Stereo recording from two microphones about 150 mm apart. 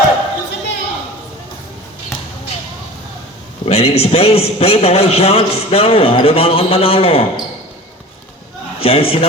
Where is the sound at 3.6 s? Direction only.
40° left (ahead or behind).